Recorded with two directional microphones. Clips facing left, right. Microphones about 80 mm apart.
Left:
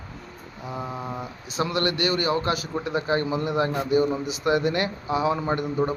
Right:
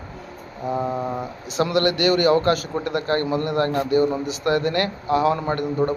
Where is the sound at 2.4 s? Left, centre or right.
Centre.